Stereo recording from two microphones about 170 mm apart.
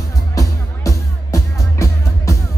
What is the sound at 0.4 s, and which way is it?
Music, 20° left (ahead or behind).